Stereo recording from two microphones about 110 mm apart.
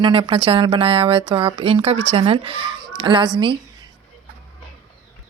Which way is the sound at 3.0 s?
45° right (ahead or behind).